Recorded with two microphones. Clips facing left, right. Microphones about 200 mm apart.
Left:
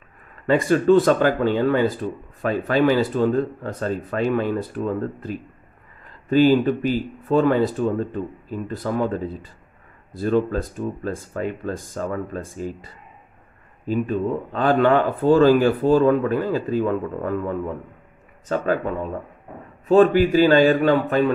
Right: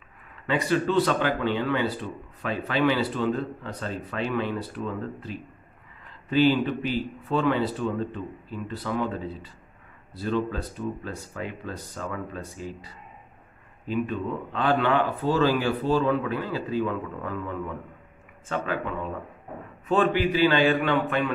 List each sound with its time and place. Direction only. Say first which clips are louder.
0.5 s a man's voice: left 8 dB; 45° left (ahead or behind)